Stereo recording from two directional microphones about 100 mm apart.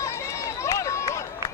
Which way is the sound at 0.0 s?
30° left (ahead or behind).